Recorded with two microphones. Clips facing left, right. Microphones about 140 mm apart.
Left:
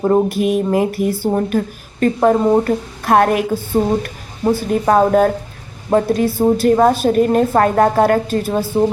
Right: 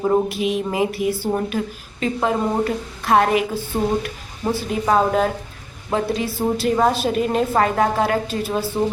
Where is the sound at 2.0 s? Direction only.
50° left (ahead or behind).